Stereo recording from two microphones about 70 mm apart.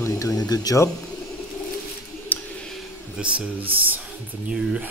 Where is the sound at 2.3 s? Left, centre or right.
Left.